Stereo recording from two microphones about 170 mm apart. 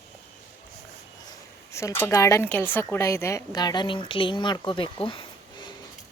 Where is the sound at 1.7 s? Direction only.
15° left (ahead or behind).